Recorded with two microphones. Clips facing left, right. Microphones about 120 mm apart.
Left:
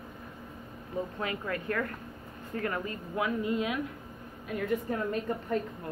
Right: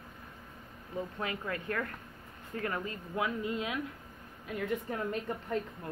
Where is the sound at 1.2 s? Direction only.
25° right (ahead or behind).